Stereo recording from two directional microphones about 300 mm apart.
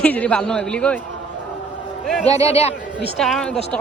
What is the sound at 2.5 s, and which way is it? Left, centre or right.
Speech, left.